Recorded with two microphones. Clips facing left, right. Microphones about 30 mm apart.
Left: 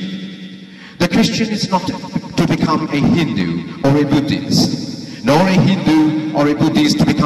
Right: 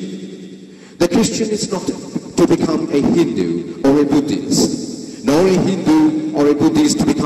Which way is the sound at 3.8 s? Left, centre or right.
Left.